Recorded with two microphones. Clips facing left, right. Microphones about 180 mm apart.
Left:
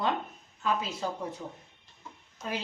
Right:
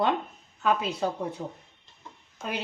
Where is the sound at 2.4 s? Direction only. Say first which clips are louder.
Right 2 dB; 65° right (ahead or behind).